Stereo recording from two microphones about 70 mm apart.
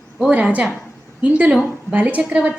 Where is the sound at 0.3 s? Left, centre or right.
Right.